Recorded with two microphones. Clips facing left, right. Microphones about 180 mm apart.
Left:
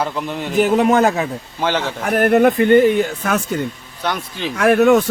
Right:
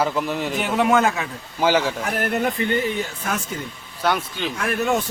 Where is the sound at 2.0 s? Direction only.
55° left (ahead or behind).